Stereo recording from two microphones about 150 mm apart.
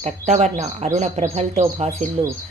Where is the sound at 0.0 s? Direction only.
50° right (ahead or behind).